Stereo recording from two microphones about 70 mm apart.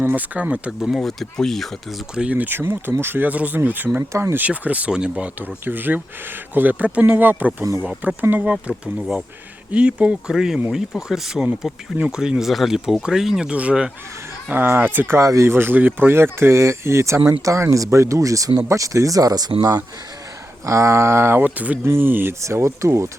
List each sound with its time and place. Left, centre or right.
0.0 s speech: right
0.8 s speech: centre
2.1 s speech: centre
4.1 s speech: right
4.4 s speech: right
5.6 s speech: right
8.4 s speech: centre
14.5 s speech: right
15.1 s speech: right
20.7 s speech: right
21.4 s speech: right
21.8 s speech: right